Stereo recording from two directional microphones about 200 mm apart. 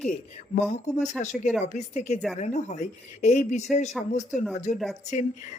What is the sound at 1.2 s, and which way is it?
A woman's voice, 35° left (ahead or behind).